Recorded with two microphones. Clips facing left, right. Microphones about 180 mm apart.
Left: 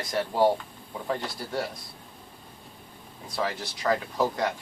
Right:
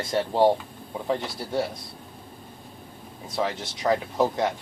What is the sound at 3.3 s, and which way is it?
Speech, 20° right (ahead or behind).